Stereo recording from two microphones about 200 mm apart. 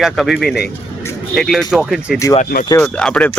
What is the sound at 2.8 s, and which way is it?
Speech, 5° left (ahead or behind).